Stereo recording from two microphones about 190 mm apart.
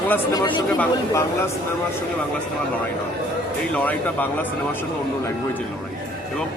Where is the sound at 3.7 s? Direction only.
10° left (ahead or behind).